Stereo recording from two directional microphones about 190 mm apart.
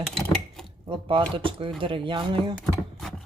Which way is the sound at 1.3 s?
25° right (ahead or behind).